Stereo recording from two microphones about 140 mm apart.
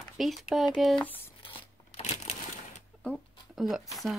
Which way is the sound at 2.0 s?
55° left (ahead or behind).